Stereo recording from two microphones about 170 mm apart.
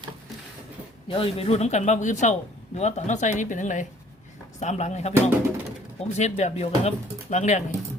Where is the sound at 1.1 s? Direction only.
35° left (ahead or behind).